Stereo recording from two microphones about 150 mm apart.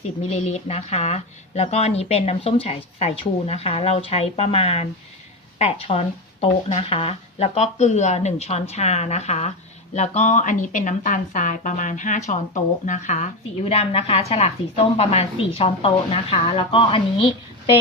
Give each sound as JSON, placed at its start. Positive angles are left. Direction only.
{"t": 0.2, "sound": "a woman's voice", "side_deg": 45}